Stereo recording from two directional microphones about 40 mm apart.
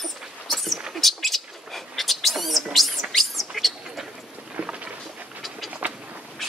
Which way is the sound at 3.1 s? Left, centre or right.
Centre.